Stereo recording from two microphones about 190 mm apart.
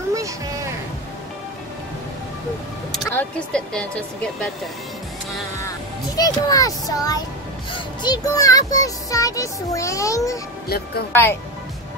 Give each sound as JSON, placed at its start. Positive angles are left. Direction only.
{"t": 0.1, "sound": "a sound", "side_deg": -15}
{"t": 3.1, "sound": "speech", "side_deg": 5}
{"t": 6.0, "sound": "a child's voice", "side_deg": 20}
{"t": 10.7, "sound": "a woman's voice", "side_deg": 55}